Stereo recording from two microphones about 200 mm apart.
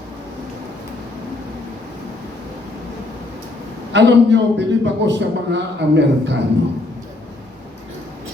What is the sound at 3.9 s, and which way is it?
A man's voice, 60° right (ahead or behind).